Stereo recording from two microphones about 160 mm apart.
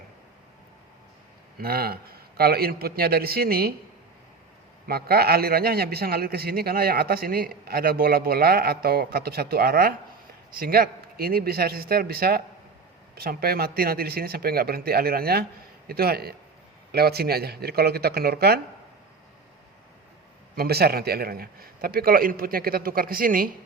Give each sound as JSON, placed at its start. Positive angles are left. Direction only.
{"t": 1.5, "sound": "a man's voice", "side_deg": -75}
{"t": 4.9, "sound": "a man's voice", "side_deg": -75}
{"t": 20.6, "sound": "a man's voice", "side_deg": -80}